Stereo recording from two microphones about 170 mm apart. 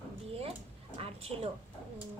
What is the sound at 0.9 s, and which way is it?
Speech, 35° right (ahead or behind).